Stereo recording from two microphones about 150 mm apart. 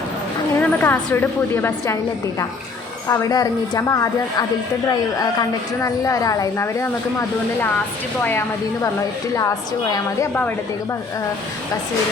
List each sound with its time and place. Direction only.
0.6 s a woman's voice: 15° left (ahead or behind)